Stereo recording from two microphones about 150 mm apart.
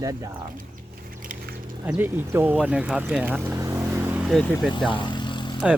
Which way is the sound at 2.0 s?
15° right (ahead or behind).